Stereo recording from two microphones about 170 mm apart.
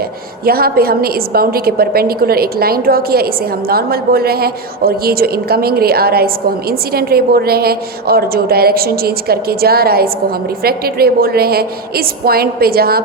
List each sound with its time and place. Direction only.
0.4 s a woman's voice: 60° right (ahead or behind)